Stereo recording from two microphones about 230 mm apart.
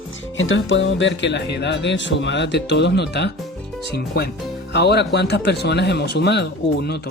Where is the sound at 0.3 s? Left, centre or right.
Left.